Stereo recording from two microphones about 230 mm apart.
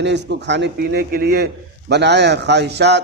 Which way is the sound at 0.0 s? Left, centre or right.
Right.